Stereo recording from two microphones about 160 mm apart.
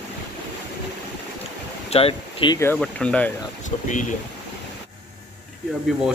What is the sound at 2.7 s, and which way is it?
Speech, 5° left (ahead or behind).